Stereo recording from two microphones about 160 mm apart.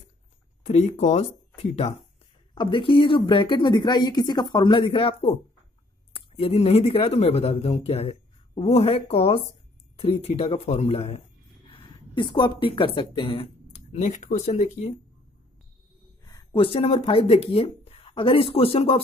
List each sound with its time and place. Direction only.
0.7 s speech: 45° left (ahead or behind)
2.5 s speech: 30° left (ahead or behind)
12.2 s speech: 30° left (ahead or behind)
16.3 s speech: 30° left (ahead or behind)